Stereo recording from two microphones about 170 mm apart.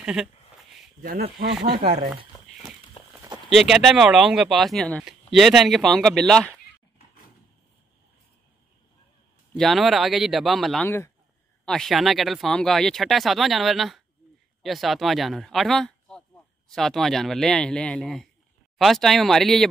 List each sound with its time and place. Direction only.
0.0 s speech: 5° right (ahead or behind)
1.0 s speech: 65° right (ahead or behind)
3.0 s a sound: 35° left (ahead or behind)
3.4 s speech: centre (ahead or behind)
9.6 s speech: centre (ahead or behind)